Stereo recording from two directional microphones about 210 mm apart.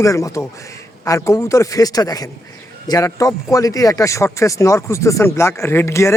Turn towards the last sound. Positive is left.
turn(degrees=15)  # may be behind; listen again after turning